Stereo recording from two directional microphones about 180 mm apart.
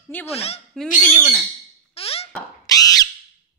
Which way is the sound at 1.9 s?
35° left (ahead or behind).